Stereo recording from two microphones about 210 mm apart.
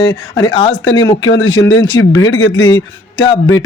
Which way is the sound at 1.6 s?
60° left (ahead or behind).